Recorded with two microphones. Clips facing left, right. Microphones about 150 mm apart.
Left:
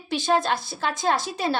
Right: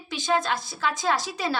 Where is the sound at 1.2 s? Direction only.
55° left (ahead or behind).